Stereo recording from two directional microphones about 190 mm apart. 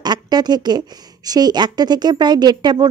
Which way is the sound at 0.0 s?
20° right (ahead or behind).